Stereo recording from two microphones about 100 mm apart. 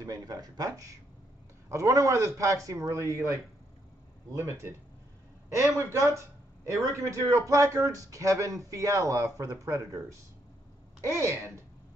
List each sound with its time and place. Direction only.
0.0 s speech: 35° right (ahead or behind)
11.1 s speech: 30° right (ahead or behind)